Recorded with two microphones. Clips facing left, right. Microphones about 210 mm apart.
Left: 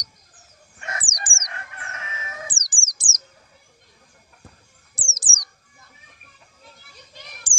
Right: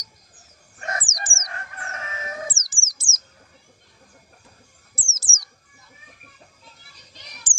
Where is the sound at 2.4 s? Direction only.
15° left (ahead or behind).